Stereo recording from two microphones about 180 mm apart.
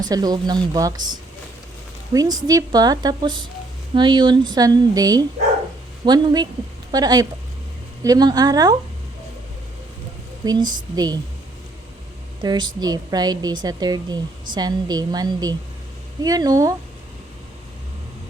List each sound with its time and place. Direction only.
0.0 s a woman's voice: 20° right (ahead or behind)
10.4 s a woman's voice: 20° right (ahead or behind)
12.4 s a woman's voice: 25° right (ahead or behind)